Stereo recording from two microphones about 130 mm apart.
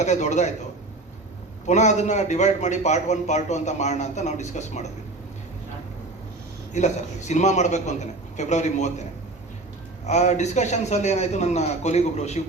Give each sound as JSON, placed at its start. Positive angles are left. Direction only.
{"t": 0.0, "sound": "a man's voice", "side_deg": 65}
{"t": 1.6, "sound": "a man's voice", "side_deg": 65}
{"t": 6.7, "sound": "a man's voice", "side_deg": 65}
{"t": 10.1, "sound": "a man's voice", "side_deg": 60}